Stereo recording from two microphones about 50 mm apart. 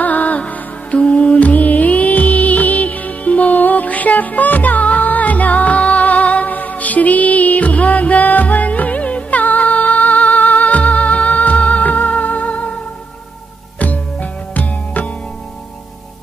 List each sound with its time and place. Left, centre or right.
0.0 s music: left
13.7 s music: left